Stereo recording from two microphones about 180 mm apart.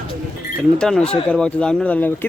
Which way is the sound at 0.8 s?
5° left (ahead or behind).